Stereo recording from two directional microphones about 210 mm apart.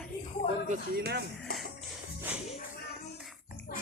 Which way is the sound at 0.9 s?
50° right (ahead or behind).